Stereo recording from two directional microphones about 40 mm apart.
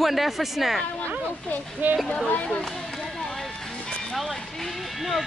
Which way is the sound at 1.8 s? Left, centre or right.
Right.